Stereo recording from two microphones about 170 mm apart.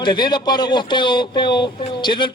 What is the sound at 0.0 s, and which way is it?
Speech, 25° left (ahead or behind).